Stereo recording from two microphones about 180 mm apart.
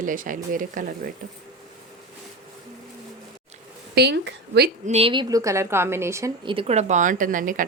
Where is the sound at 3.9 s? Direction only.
70° right (ahead or behind).